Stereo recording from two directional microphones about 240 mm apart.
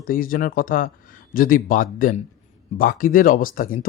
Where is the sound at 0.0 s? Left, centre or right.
Left.